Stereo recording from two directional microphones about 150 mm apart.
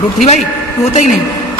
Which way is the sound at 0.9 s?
55° left (ahead or behind).